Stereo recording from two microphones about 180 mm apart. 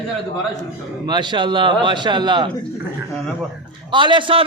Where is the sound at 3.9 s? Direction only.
25° right (ahead or behind).